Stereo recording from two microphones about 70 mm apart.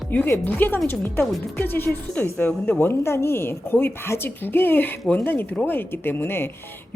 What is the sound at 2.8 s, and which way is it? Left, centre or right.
A woman's voice, left.